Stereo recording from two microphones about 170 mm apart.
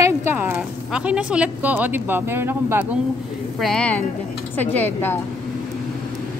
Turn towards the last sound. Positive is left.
turn(degrees=10)  # may be behind; listen again after turning